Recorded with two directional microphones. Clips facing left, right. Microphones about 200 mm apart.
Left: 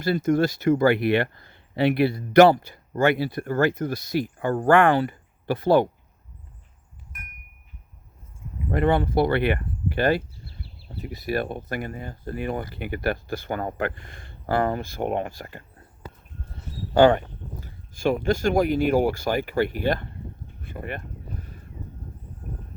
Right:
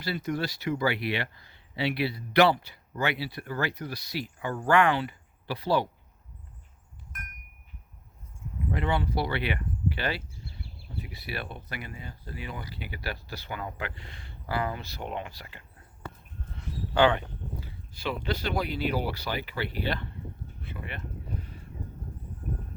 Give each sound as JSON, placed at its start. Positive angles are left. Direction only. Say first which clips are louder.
{"t": 0.0, "sound": "speech", "louder": "left 10 dB", "side_deg": 50}
{"t": 8.7, "sound": "speech", "louder": "left 8 dB", "side_deg": 50}
{"t": 20.6, "sound": "a sound", "louder": "left 7 dB", "side_deg": 45}